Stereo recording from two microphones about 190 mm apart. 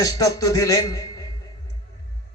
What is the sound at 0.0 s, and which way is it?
Speech, 20° left (ahead or behind).